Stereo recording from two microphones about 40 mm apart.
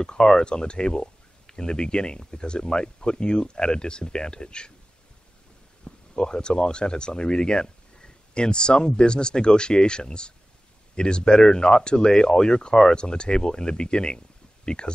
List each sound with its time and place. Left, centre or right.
0.0 s speech: centre
5.9 s speech: left